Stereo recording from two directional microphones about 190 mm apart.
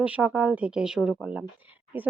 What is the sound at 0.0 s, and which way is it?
A woman's voice, 10° right (ahead or behind).